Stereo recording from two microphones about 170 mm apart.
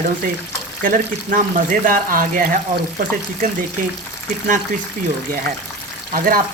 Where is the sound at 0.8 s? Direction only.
50° right (ahead or behind).